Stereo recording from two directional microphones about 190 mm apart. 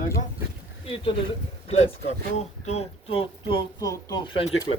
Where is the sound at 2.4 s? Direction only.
35° left (ahead or behind).